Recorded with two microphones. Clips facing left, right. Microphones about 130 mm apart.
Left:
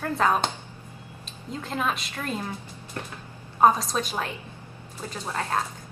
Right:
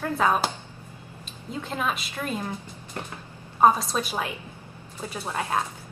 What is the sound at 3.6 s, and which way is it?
A woman's voice, 5° right (ahead or behind).